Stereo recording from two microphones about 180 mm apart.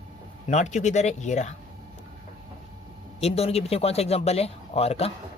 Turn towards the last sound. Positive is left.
turn(degrees=35)  # may be behind; listen again after turning